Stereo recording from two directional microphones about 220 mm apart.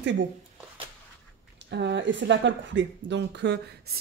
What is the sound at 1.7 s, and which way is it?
Speech, 50° right (ahead or behind).